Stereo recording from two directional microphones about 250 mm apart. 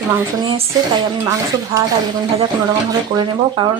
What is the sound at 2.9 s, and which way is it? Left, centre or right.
Speech, centre.